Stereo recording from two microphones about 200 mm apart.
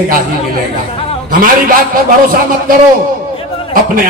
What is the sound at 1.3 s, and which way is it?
A man's voice, 45° right (ahead or behind).